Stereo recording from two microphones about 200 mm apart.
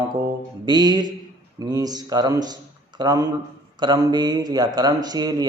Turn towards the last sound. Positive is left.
turn(degrees=-20)  # may be behind; listen again after turning